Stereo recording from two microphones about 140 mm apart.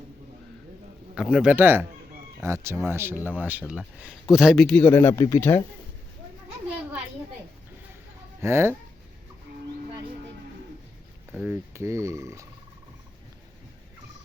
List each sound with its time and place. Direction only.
1.1 s speech: 5° right (ahead or behind); by 5.6 s 20° left (ahead or behind)
8.4 s speech: 20° right (ahead or behind)
11.3 s speech: 10° right (ahead or behind)